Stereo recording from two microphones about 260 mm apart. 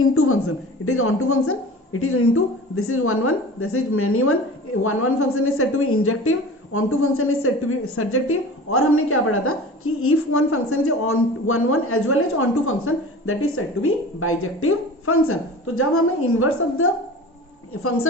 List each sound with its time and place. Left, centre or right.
0.0 s a woman's voice: left